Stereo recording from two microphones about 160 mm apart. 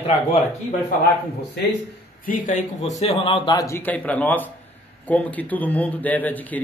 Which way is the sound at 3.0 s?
40° left (ahead or behind).